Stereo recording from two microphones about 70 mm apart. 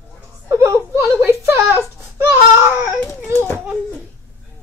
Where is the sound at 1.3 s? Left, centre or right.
Right.